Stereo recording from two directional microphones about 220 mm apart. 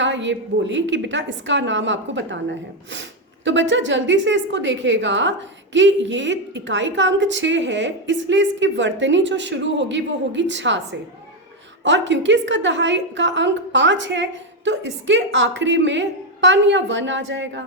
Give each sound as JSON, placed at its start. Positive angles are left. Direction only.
{"t": 0.0, "sound": "a woman's voice", "side_deg": -55}